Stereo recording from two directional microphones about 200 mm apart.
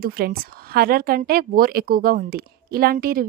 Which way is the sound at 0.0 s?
50° right (ahead or behind).